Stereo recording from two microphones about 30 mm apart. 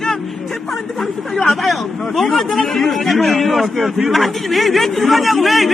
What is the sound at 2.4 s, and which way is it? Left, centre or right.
A man's voice, centre.